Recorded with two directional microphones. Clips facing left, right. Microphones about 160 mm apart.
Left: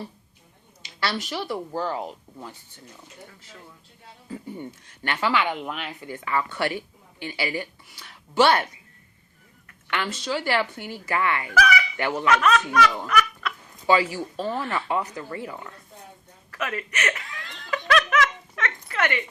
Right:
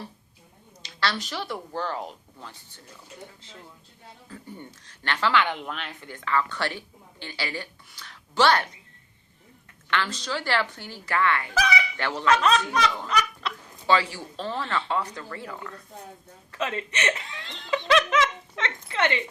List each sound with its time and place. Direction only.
0.9 s speech: 10° left (ahead or behind)
5.0 s speech: 10° left (ahead or behind)
10.1 s speech: 5° left (ahead or behind)
11.5 s fowl: 25° right (ahead or behind)
11.9 s speech: 10° left (ahead or behind)
12.3 s speech: 30° right (ahead or behind)
13.4 s chicken: 30° right (ahead or behind)
13.8 s speech: 10° left (ahead or behind)
16.5 s laughter: 25° right (ahead or behind)